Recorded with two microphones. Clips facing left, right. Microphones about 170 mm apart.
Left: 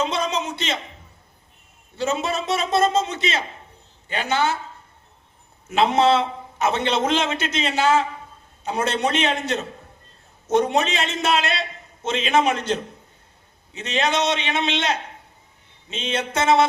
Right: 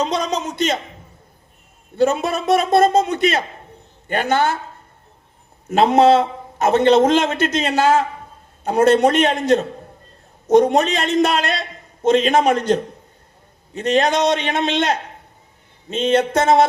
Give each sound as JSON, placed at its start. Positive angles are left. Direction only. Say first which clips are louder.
{"t": 0.0, "sound": "a man's voice", "louder": "right 3 dB", "side_deg": -40}
{"t": 2.0, "sound": "a man's voice", "louder": "right 6 dB", "side_deg": -55}
{"t": 5.6, "sound": "a man's voice", "louder": "right 5 dB", "side_deg": -45}
{"t": 10.5, "sound": "a man's voice", "louder": "right 6 dB", "side_deg": -40}